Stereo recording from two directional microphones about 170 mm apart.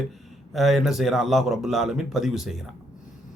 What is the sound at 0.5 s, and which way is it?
Speech, centre (ahead or behind).